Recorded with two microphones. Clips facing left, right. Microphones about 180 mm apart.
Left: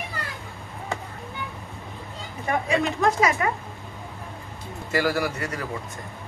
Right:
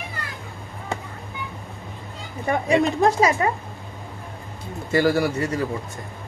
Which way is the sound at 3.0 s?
30° right (ahead or behind).